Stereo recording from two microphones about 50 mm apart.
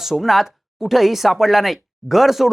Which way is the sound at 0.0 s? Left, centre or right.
Centre.